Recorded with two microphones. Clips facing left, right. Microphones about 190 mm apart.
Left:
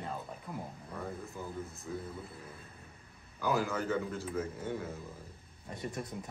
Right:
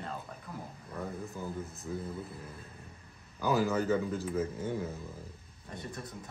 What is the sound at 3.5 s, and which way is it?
Speech, 20° right (ahead or behind).